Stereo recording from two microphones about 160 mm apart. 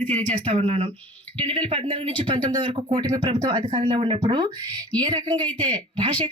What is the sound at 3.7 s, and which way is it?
Speech, 40° right (ahead or behind).